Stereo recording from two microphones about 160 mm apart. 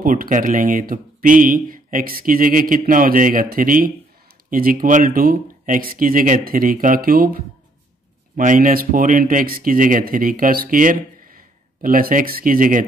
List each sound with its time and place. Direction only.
0.0 s speech: 55° right (ahead or behind)